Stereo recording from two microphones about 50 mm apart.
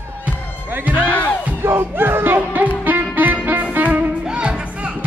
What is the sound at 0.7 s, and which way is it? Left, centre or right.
Music, right.